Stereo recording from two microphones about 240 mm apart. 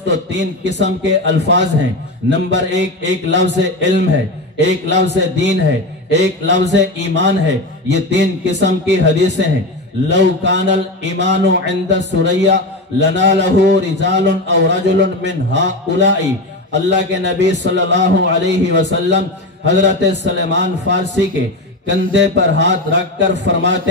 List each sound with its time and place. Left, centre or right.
0.0 s speech: right
22.1 s speech: right